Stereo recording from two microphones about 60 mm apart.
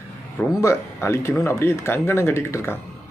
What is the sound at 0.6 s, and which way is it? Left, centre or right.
Speech, left.